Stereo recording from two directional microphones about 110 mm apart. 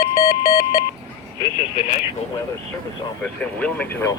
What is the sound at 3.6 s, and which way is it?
Speech, 15° left (ahead or behind).